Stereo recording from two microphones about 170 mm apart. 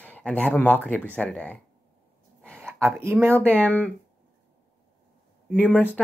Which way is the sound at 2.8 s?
15° right (ahead or behind).